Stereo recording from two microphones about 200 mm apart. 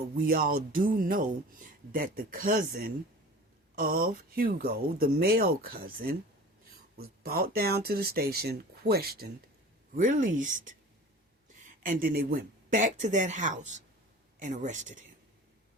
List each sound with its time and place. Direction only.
0.2 s speech: 45° right (ahead or behind)